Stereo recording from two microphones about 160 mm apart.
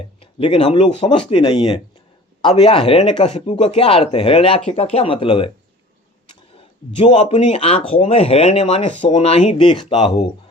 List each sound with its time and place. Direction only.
0.2 s speech: 35° left (ahead or behind)
7.0 s speech: 40° left (ahead or behind)
9.6 s speech: 30° left (ahead or behind)